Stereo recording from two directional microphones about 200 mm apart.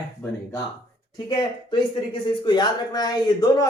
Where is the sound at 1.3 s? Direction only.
25° left (ahead or behind).